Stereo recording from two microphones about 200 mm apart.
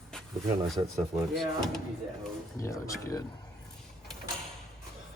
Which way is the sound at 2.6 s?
15° left (ahead or behind).